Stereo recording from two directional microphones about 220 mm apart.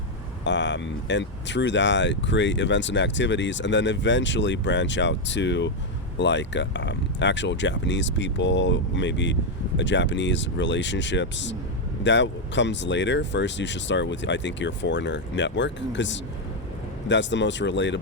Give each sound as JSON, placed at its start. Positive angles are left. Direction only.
{"t": 0.4, "sound": "speech", "side_deg": 55}